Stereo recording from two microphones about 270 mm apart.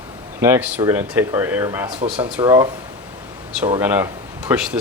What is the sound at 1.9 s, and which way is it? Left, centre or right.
Speech, right.